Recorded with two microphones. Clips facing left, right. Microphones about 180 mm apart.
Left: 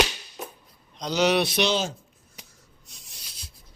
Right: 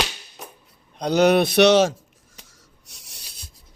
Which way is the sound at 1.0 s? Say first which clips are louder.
Right 6 dB; 55° right (ahead or behind).